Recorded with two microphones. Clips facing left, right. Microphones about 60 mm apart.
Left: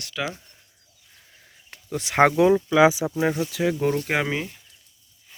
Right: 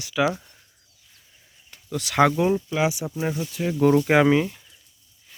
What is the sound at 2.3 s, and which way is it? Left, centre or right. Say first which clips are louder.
Speech: left 4 dB; left.